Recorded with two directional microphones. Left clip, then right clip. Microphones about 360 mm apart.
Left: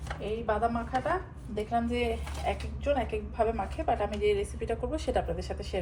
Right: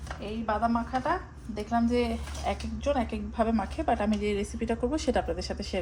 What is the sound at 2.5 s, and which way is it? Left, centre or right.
A woman's voice, right.